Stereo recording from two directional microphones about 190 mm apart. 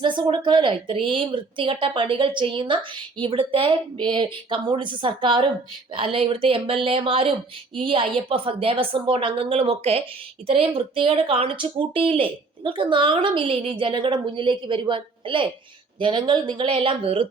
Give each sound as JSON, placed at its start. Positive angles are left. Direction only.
{"t": 0.0, "sound": "a woman's voice", "side_deg": -25}